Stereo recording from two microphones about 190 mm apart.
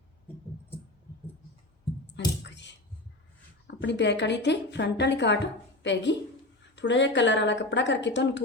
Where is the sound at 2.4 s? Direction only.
65° left (ahead or behind).